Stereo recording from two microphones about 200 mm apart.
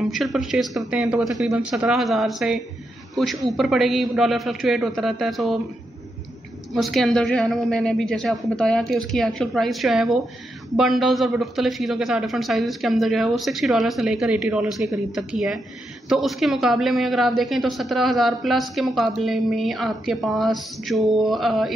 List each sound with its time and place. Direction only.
0.0 s a woman's voice: centre (ahead or behind)
6.7 s a woman's voice: centre (ahead or behind)